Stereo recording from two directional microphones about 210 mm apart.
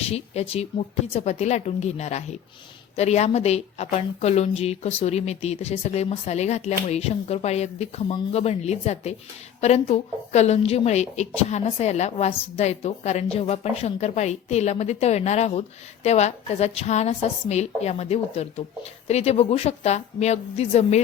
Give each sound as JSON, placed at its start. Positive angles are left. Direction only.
{"t": 0.0, "sound": "a woman's voice", "side_deg": 30}